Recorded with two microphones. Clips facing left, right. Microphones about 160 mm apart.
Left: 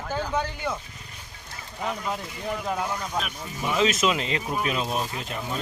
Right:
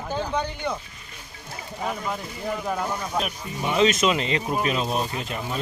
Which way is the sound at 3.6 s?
Centre (ahead or behind).